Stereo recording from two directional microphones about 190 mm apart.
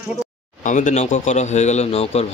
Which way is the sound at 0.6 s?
40° left (ahead or behind).